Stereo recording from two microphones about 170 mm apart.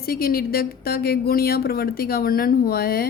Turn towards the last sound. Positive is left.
turn(degrees=65)  # may be behind; listen again after turning